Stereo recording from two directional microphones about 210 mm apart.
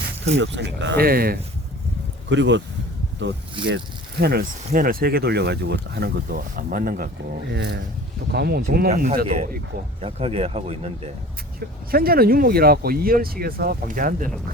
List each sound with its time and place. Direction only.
0.3 s speech: 60° right (ahead or behind)
2.3 s speech: 60° right (ahead or behind)
4.2 s speech: 45° right (ahead or behind); by 11.1 s 30° right (ahead or behind)
11.9 s speech: 45° right (ahead or behind)